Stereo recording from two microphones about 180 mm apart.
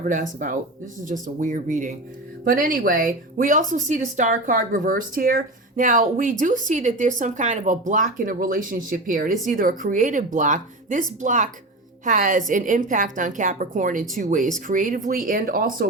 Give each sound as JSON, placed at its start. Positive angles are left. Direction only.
{"t": 0.0, "sound": "a woman's voice", "side_deg": -45}